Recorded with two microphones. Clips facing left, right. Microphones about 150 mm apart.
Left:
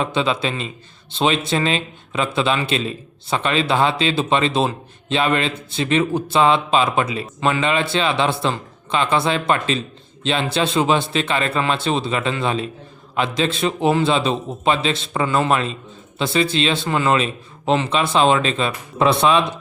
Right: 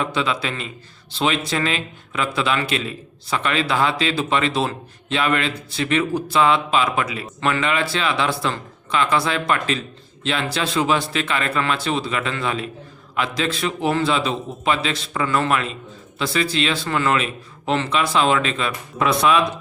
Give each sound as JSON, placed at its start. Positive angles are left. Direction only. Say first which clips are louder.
{"t": 0.0, "sound": "speech", "louder": "left 3 dB", "side_deg": 25}